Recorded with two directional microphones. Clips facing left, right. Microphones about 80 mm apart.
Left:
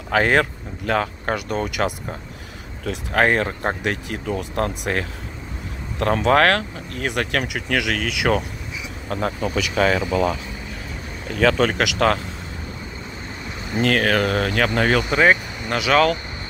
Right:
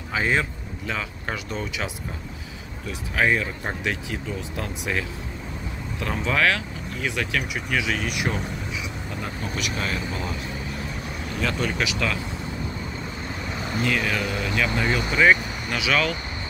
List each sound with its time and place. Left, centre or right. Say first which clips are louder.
0.1 s speech: left 6 dB; left
7.4 s speech: left 3 dB; left
9.1 s speech: left 11 dB; left
11.3 s speech: left 8 dB; left
13.7 s speech: left 7 dB; left
15.1 s speech: right 2 dB; left